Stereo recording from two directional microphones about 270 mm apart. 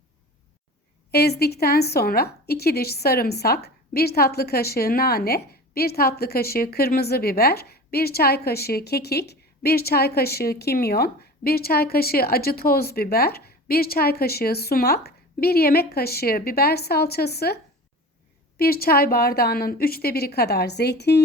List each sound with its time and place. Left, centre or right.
1.1 s a woman's voice: left